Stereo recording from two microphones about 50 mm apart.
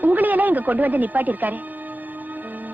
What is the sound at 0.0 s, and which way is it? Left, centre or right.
A woman's voice, right.